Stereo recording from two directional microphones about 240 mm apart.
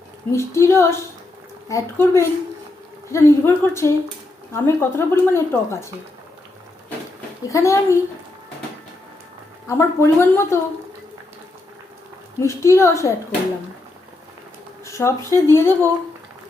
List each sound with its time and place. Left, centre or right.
0.3 s speech: centre
7.4 s speech: centre
9.6 s speech: centre
12.4 s speech: centre
14.8 s speech: centre